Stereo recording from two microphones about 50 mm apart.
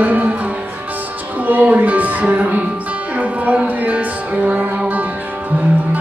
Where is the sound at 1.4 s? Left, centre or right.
Right.